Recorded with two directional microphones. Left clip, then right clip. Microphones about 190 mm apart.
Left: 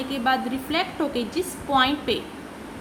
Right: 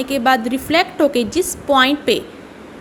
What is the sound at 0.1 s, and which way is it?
A woman's voice, 40° right (ahead or behind).